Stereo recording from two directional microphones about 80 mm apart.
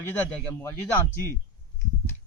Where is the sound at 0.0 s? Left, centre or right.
Left.